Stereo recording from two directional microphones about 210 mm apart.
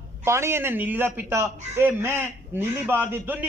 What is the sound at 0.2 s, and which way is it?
A man's voice, 10° right (ahead or behind).